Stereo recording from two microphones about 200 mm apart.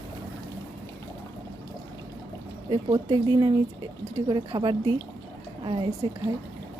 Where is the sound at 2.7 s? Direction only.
30° right (ahead or behind).